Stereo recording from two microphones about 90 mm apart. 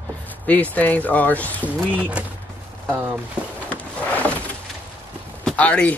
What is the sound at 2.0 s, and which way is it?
Speech, 15° right (ahead or behind).